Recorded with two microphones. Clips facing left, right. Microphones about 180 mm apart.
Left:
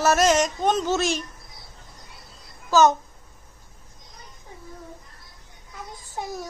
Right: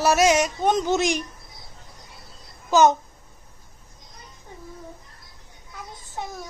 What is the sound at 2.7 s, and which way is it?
Speech, 20° right (ahead or behind).